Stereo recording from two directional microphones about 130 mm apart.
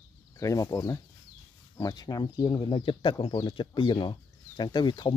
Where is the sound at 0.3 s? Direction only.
25° left (ahead or behind).